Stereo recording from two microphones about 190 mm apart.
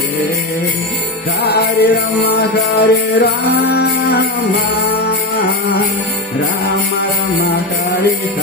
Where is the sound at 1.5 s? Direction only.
60° left (ahead or behind).